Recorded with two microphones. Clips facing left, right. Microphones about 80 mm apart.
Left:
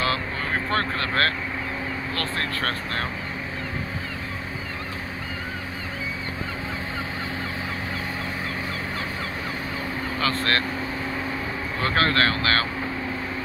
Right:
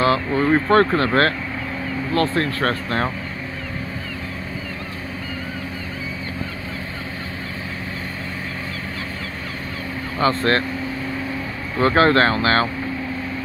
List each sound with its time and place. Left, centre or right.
0.0 s speech: right
10.2 s speech: right
11.8 s speech: right